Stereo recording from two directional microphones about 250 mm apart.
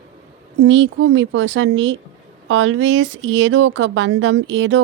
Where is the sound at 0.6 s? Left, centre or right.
Right.